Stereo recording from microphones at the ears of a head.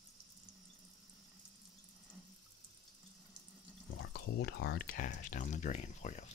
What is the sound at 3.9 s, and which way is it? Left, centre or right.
Speech, left.